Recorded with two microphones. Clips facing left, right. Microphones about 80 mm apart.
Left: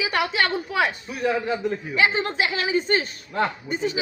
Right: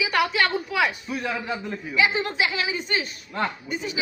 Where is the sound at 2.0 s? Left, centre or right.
Left.